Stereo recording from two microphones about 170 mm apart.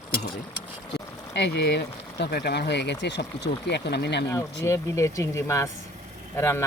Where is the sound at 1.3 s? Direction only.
85° left.